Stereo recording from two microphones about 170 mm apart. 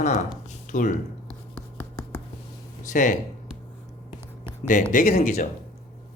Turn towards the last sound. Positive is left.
turn(degrees=40)  # may be behind; listen again after turning